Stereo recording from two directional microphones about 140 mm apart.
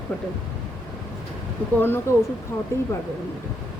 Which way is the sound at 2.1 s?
20° left (ahead or behind).